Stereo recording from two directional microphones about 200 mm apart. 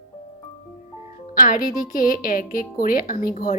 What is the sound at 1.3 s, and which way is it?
A woman's voice, 45° left (ahead or behind).